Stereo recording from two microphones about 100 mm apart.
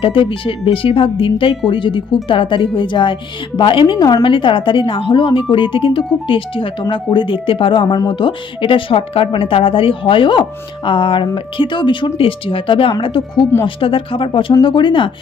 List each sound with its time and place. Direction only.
0.0 s speech: 60° left (ahead or behind)
3.9 s a woman's voice: 40° left (ahead or behind)
4.2 s speech: 55° left (ahead or behind)